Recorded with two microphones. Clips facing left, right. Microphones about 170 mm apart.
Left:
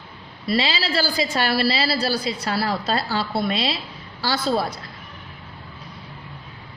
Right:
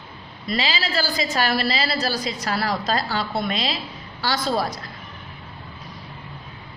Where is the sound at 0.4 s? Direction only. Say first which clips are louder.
Left 3 dB; 30° left (ahead or behind).